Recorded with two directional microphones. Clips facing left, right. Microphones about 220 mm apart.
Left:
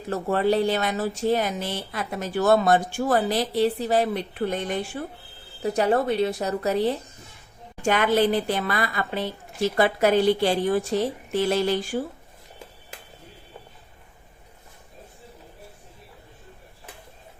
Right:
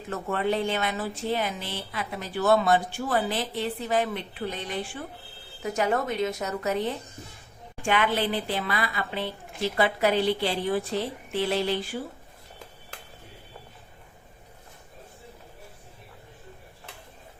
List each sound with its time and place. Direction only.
0.1 s speech: 35° left (ahead or behind)
5.6 s a woman's voice: 35° left (ahead or behind)